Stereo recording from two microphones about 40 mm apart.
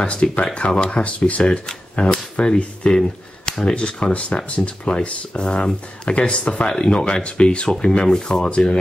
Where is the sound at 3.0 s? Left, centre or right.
Centre.